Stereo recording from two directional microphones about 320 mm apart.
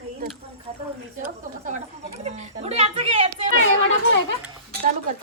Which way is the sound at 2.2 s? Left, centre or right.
Right.